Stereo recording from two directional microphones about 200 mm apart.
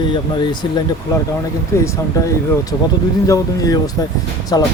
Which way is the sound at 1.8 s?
15° left (ahead or behind).